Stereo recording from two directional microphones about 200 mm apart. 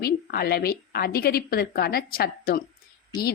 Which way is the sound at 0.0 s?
50° left (ahead or behind).